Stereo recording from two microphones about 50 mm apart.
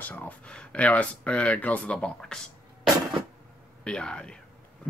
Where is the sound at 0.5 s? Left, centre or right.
Left.